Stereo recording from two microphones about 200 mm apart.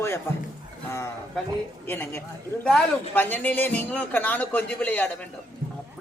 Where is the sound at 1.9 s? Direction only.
10° left (ahead or behind).